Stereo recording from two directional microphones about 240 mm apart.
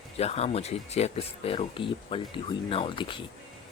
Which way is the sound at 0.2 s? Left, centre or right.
Left.